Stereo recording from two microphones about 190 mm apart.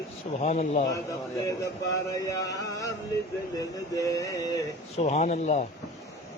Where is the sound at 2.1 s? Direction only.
15° left (ahead or behind).